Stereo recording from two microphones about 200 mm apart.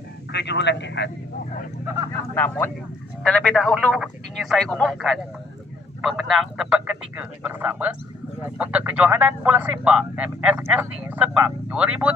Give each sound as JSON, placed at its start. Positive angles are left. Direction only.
{"t": 0.3, "sound": "a man's voice", "side_deg": 60}
{"t": 2.3, "sound": "speech", "side_deg": 10}